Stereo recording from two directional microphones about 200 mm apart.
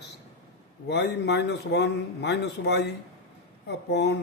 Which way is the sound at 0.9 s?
60° left (ahead or behind).